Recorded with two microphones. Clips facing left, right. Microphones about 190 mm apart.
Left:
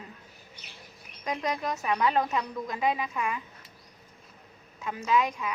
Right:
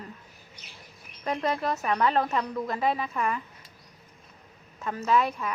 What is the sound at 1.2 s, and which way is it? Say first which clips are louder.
A woman's voice: right 3 dB; 15° left (ahead or behind).